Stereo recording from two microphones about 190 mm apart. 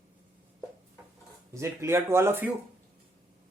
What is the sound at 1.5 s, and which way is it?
Speech, 15° right (ahead or behind).